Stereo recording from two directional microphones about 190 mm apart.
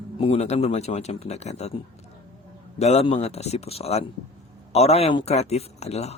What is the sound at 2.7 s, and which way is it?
Speech, 35° left (ahead or behind).